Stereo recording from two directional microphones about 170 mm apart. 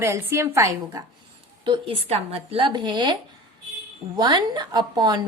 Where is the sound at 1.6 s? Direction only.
30° right (ahead or behind).